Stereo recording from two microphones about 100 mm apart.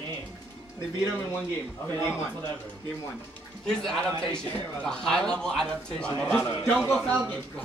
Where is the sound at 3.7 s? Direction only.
5° left (ahead or behind).